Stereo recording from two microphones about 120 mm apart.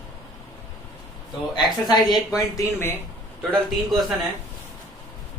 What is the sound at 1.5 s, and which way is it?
Speech, 35° left (ahead or behind).